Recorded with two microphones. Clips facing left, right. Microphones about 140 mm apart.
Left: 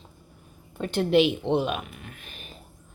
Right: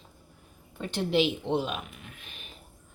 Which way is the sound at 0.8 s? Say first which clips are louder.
Left 5 dB; 55° left (ahead or behind).